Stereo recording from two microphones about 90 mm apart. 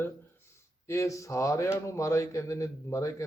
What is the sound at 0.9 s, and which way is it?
Speech, 35° left (ahead or behind).